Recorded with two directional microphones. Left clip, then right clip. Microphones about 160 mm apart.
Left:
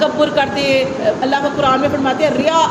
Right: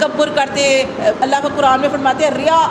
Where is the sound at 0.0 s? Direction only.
35° right (ahead or behind).